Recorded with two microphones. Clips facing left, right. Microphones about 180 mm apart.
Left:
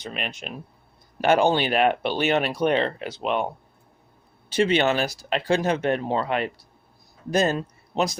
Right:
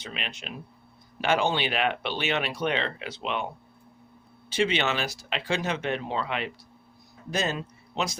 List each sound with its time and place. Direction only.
0.0 s speech: 45° left (ahead or behind)
4.5 s a man's voice: 45° left (ahead or behind)